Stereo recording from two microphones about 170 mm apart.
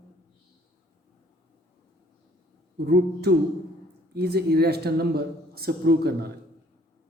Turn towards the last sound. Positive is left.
turn(degrees=-70)  # may be behind; listen again after turning